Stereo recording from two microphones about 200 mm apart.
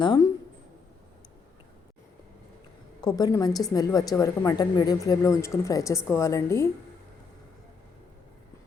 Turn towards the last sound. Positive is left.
turn(degrees=15)  # may be behind; listen again after turning